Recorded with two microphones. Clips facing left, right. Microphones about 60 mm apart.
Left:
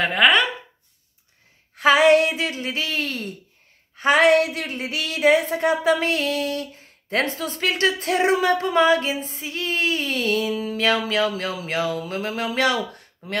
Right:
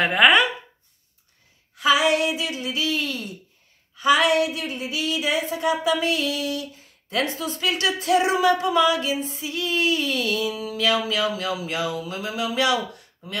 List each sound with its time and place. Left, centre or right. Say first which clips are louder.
0.0 s speech: right 1 dB; centre
1.8 s speech: left 5 dB; left